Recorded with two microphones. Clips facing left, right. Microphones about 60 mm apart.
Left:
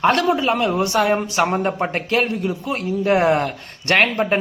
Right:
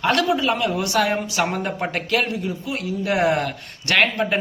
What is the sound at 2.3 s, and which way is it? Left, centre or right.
Speech, left.